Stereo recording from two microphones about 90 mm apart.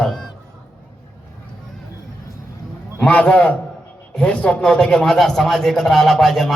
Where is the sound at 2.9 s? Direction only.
15° left (ahead or behind).